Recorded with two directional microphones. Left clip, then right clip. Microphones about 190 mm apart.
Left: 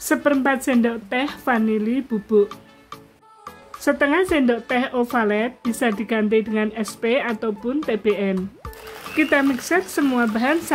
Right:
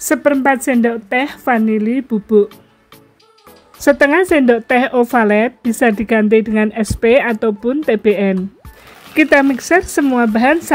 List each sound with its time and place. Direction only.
0.0 s speech: 25° right (ahead or behind)
3.8 s speech: 30° right (ahead or behind)